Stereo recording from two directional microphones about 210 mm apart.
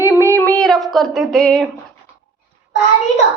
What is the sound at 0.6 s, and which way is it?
Speech, centre (ahead or behind).